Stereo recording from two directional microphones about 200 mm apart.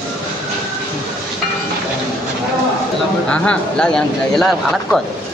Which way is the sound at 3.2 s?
5° left (ahead or behind).